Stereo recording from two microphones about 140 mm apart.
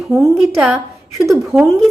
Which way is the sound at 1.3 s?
5° right (ahead or behind).